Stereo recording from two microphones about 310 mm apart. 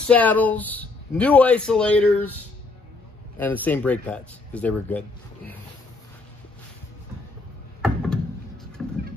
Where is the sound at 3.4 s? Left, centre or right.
Centre.